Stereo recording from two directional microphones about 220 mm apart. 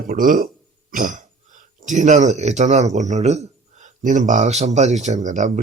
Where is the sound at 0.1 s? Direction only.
40° right (ahead or behind).